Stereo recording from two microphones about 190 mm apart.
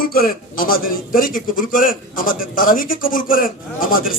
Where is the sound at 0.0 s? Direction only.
50° left (ahead or behind).